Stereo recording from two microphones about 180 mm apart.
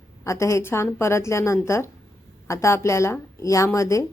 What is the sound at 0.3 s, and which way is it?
Speech, 15° left (ahead or behind).